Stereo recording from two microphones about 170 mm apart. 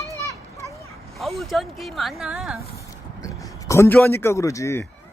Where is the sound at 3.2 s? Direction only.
20° left (ahead or behind).